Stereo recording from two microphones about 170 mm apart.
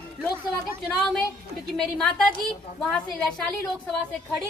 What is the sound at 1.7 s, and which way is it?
A woman's voice, 5° left (ahead or behind).